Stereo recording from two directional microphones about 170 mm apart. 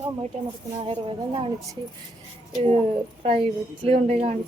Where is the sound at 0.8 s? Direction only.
30° right (ahead or behind).